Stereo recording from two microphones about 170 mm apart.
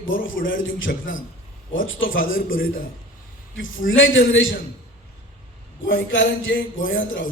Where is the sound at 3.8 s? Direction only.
90° left.